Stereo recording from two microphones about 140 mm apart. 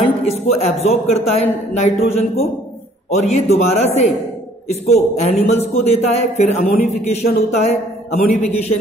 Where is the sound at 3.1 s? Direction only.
50° left (ahead or behind).